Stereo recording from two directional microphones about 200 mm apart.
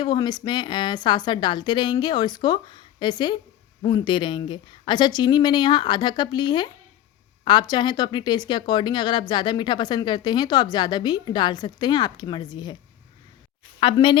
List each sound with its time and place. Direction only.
0.0 s speech: 20° left (ahead or behind)
13.7 s speech: 25° left (ahead or behind)